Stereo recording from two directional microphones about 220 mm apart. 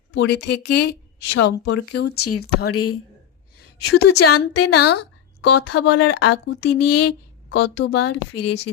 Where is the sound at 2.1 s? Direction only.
90° left.